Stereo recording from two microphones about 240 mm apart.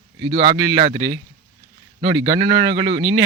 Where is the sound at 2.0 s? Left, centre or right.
Right.